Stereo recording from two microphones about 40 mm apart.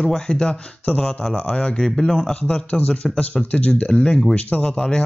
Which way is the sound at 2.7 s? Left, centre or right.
Left.